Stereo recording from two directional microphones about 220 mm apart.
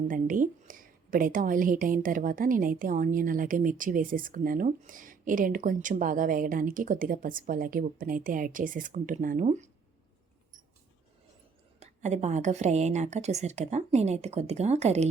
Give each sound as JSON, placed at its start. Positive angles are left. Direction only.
{"t": 0.1, "sound": "a woman's voice", "side_deg": -35}
{"t": 11.8, "sound": "a woman's voice", "side_deg": -30}